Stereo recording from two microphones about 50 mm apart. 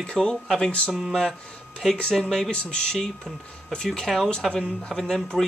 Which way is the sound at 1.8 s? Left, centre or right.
Centre.